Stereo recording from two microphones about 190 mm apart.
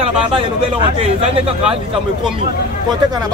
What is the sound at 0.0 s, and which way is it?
Speech, 30° right (ahead or behind).